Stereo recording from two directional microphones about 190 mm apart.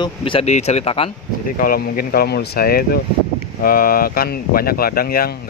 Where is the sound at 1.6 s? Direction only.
50° left (ahead or behind).